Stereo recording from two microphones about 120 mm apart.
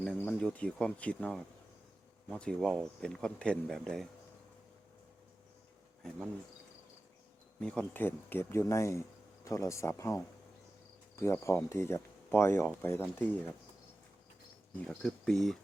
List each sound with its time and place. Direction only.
0.2 s speech: 10° left (ahead or behind)
7.6 s speech: 10° left (ahead or behind)
14.8 s speech: 5° left (ahead or behind)